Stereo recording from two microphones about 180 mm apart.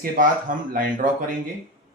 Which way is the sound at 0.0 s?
50° right (ahead or behind).